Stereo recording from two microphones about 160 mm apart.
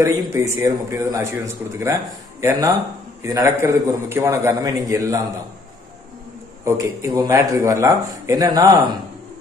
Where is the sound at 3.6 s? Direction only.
15° right (ahead or behind).